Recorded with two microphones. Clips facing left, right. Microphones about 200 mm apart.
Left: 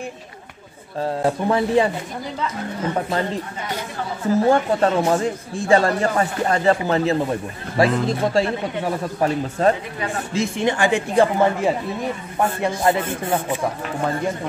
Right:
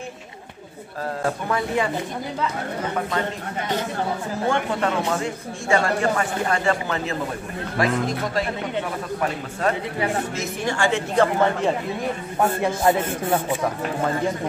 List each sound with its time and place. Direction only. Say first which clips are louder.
1.2 s speech: left 5 dB; 30° left (ahead or behind)
4.5 s speech: left 3 dB; 35° left (ahead or behind)
9.9 s speech: right 3 dB; 20° right (ahead or behind)
10.3 s speech: left 5 dB; 25° left (ahead or behind); by 11.7 s 10° left (ahead or behind)
12.6 s speech: left 2 dB; 5° right (ahead or behind)